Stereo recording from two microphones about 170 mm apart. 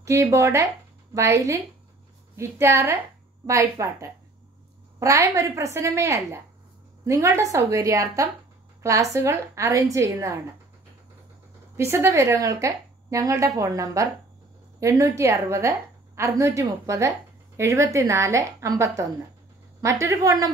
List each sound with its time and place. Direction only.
0.0 s a woman's voice: 15° right (ahead or behind)
11.7 s a woman's voice: 15° right (ahead or behind)